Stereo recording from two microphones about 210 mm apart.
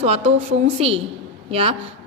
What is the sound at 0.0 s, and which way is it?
A woman's voice, 30° right (ahead or behind).